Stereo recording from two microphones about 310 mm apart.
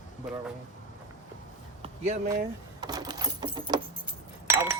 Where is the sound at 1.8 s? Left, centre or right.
Centre.